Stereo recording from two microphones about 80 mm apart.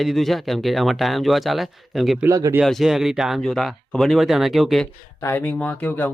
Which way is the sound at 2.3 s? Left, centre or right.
Right.